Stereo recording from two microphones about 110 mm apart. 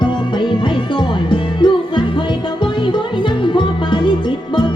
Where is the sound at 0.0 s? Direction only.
45° left (ahead or behind).